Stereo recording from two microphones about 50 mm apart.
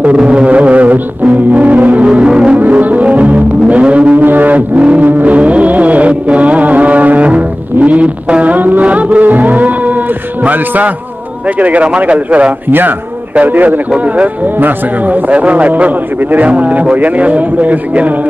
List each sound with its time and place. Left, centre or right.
0.0 s music: right
2.0 s music: centre
2.6 s music: right
11.6 s a man's voice: right